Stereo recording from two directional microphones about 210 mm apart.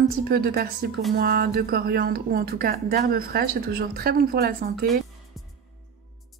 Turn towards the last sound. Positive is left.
turn(degrees=0)  # may be behind; listen again after turning